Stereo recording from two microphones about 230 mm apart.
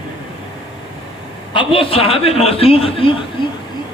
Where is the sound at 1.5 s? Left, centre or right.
Left.